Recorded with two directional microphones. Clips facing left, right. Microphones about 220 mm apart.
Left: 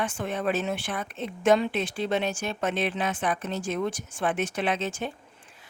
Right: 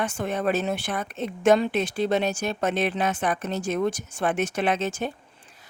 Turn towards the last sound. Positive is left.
turn(degrees=-40)  # may be behind; listen again after turning